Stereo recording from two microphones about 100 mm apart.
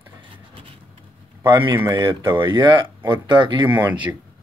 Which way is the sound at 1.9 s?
30° right (ahead or behind).